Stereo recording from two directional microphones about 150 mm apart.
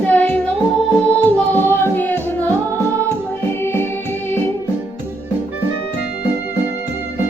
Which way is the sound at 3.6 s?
15° left (ahead or behind).